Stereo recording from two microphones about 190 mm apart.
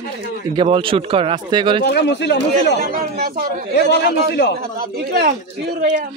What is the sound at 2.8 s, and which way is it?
Speech, 55° right (ahead or behind).